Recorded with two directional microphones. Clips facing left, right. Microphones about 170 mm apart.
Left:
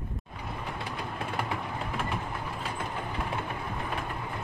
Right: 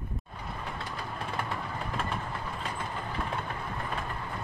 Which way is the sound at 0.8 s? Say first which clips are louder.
Left 2 dB; 10° left (ahead or behind).